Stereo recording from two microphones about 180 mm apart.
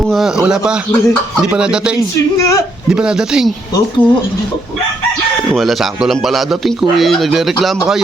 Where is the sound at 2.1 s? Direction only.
15° left (ahead or behind).